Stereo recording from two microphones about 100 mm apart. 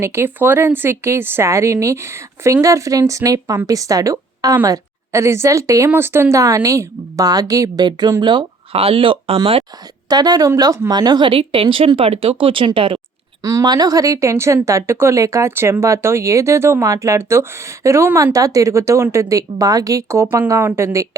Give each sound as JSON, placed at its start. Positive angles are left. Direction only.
{"t": 0.0, "sound": "a woman's voice", "side_deg": -25}
{"t": 8.7, "sound": "speech", "side_deg": -70}
{"t": 10.1, "sound": "speech", "side_deg": -40}
{"t": 13.4, "sound": "a woman's voice", "side_deg": -35}